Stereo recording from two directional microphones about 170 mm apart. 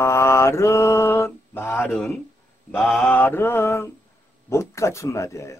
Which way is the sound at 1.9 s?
5° left (ahead or behind).